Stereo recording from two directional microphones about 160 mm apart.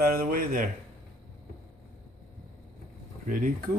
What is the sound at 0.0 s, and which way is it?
Speech, 60° right (ahead or behind).